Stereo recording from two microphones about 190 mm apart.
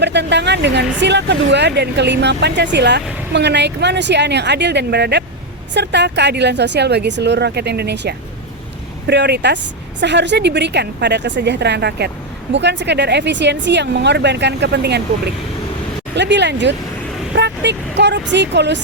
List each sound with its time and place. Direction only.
0.0 s speech: 65° right (ahead or behind)
16.1 s speech: 65° right (ahead or behind)